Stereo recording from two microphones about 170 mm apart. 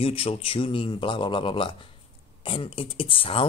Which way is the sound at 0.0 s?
35° left (ahead or behind).